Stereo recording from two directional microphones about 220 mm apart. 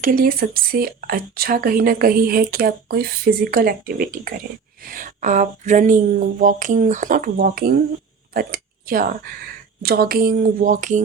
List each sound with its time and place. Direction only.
0.0 s speech: 40° right (ahead or behind)